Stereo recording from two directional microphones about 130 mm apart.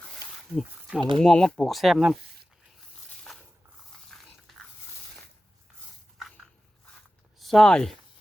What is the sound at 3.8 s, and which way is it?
Dog, 5° left (ahead or behind).